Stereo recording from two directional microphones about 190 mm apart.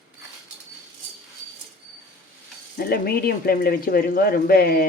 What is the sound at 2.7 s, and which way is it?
Speech, 55° left (ahead or behind).